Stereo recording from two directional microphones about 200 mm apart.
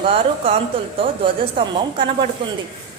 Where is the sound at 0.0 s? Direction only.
30° right (ahead or behind).